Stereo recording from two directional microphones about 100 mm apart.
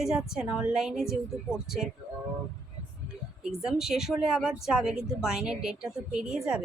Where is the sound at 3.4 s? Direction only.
5° right (ahead or behind).